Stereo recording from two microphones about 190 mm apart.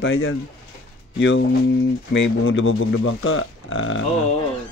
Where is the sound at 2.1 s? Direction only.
90° left.